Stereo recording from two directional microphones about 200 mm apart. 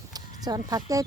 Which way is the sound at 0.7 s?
15° right (ahead or behind).